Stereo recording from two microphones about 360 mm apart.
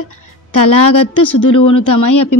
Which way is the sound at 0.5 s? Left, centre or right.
Left.